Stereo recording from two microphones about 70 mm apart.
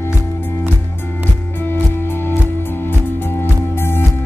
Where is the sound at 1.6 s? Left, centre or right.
Left.